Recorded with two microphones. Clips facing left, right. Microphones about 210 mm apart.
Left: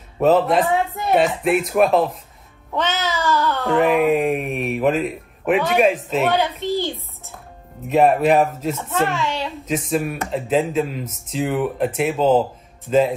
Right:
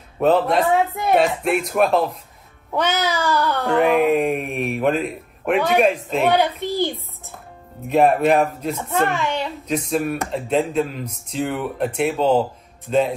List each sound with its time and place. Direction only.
0.2 s speech: centre (ahead or behind)
2.7 s babbling: 15° right (ahead or behind)
3.6 s speech: centre (ahead or behind)
7.9 s speech: centre (ahead or behind)
9.1 s a child's voice: 15° right (ahead or behind)
9.7 s speech: centre (ahead or behind)